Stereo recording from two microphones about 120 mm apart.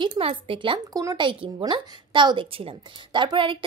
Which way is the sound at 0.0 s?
45° right (ahead or behind).